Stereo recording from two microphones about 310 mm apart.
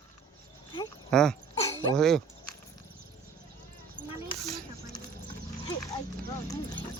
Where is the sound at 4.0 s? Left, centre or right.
Centre.